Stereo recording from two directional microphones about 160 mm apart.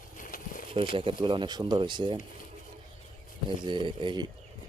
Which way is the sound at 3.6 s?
30° right (ahead or behind).